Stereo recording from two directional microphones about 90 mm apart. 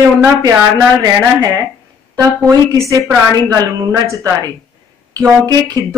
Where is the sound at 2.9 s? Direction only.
40° right (ahead or behind).